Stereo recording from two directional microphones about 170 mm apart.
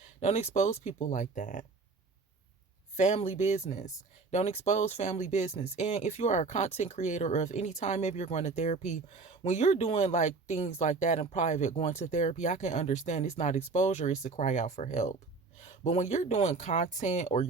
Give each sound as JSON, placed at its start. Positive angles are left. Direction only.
{"t": 0.0, "sound": "speech", "side_deg": 40}
{"t": 2.9, "sound": "speech", "side_deg": 40}